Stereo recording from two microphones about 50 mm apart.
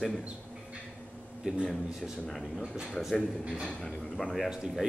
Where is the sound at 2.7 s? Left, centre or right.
Centre.